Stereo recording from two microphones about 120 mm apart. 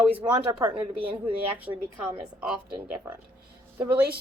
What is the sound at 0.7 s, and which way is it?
Speech, 50° right (ahead or behind).